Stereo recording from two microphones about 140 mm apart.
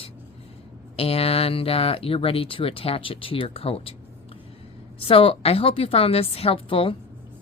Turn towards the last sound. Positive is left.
turn(degrees=40)  # may be behind; listen again after turning